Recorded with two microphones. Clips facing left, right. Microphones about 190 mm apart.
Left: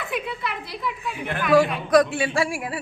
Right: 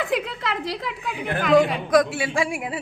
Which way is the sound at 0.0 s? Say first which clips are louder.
Right 4 dB; 90° right.